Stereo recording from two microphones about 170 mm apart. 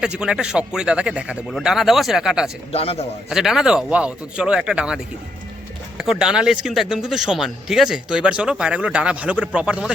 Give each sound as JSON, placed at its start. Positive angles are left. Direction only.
{"t": 0.0, "sound": "a man's voice", "side_deg": -5}
{"t": 2.7, "sound": "a man's voice", "side_deg": 35}
{"t": 3.2, "sound": "a man's voice", "side_deg": 0}
{"t": 6.0, "sound": "a man's voice", "side_deg": -5}